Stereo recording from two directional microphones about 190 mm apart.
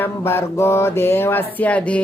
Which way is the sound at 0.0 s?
10° left (ahead or behind).